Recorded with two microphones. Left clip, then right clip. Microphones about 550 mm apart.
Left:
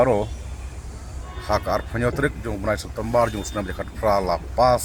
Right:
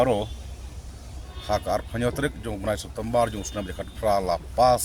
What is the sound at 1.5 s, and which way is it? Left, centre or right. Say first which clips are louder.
Speech: left 3 dB; right.